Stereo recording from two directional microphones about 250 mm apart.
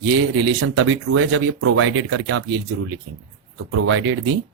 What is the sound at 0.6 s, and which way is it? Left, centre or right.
Speech, right.